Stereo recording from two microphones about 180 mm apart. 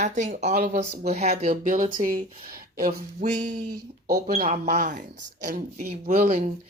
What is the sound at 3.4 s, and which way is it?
Speech, 40° right (ahead or behind).